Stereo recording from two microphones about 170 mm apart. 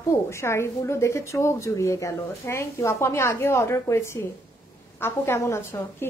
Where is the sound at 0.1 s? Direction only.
15° left (ahead or behind).